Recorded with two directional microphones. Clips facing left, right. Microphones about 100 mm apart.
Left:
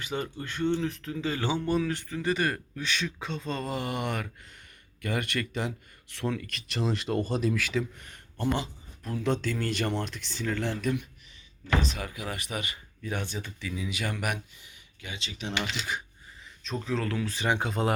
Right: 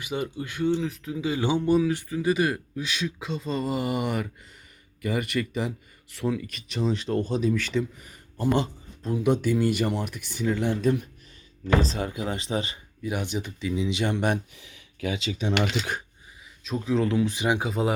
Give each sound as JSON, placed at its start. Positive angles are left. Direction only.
{"t": 0.0, "sound": "speech", "side_deg": -10}
{"t": 8.4, "sound": "speech", "side_deg": -40}
{"t": 9.0, "sound": "speech", "side_deg": -15}
{"t": 10.8, "sound": "speech", "side_deg": -35}
{"t": 13.0, "sound": "speech", "side_deg": -10}
{"t": 14.5, "sound": "a sound", "side_deg": -90}
{"t": 15.5, "sound": "speech", "side_deg": -45}
{"t": 16.6, "sound": "speech", "side_deg": -10}